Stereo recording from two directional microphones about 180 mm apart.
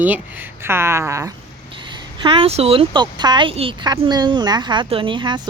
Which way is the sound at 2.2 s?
30° right (ahead or behind).